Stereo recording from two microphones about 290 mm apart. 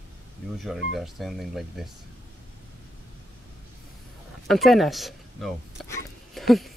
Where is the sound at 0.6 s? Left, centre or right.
Centre.